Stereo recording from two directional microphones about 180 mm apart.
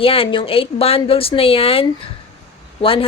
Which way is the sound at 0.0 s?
30° left (ahead or behind).